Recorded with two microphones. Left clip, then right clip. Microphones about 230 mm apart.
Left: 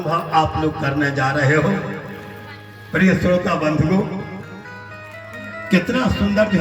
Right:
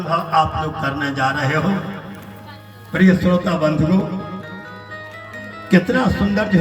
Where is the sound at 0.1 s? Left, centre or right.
Right.